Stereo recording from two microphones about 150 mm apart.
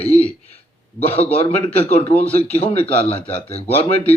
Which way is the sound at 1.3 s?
45° left (ahead or behind).